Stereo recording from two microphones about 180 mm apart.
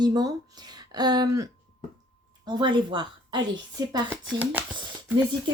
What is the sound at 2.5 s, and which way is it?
Speech, 25° right (ahead or behind).